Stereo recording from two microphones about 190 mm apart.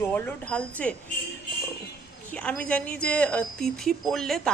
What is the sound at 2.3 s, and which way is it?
Speech, 5° left (ahead or behind).